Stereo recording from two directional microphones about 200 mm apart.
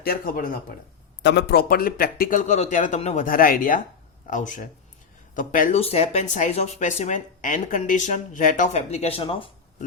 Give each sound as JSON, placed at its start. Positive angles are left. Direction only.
{"t": 0.0, "sound": "a man's voice", "side_deg": 45}
{"t": 1.2, "sound": "a man's voice", "side_deg": 60}